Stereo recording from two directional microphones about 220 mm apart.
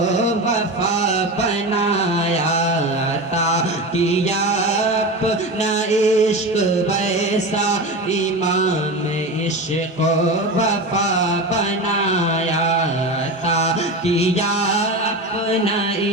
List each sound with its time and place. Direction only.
0.3 s chant: 30° left (ahead or behind)
3.3 s music: 30° left (ahead or behind)
10.6 s a sound: 30° left (ahead or behind)
14.2 s music: 30° left (ahead or behind)